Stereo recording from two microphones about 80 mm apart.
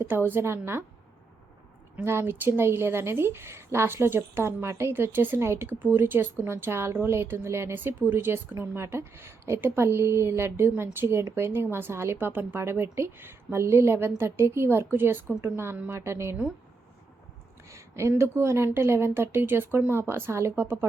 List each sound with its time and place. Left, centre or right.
0.0 s a woman's voice: right
2.0 s a woman's voice: right
17.7 s a sound: right
18.2 s a woman's voice: right